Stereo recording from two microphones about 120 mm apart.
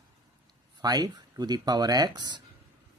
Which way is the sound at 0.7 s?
35° right (ahead or behind).